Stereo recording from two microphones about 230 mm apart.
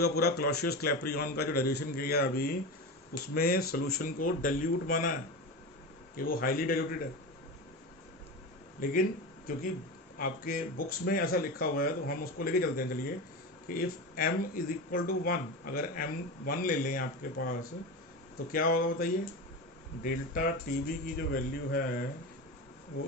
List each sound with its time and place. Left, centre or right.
0.0 s a man's voice: left
6.1 s speech: left
8.7 s speech: left
10.1 s speech: left
18.5 s speech: left